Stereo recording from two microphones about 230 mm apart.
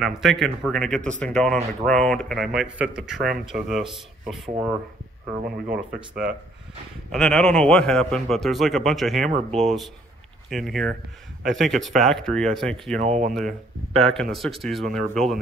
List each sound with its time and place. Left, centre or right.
0.0 s speech: centre
13.0 s speech: right
13.3 s speech: centre